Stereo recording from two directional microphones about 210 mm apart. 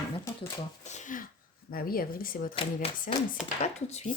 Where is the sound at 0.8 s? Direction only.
35° left (ahead or behind).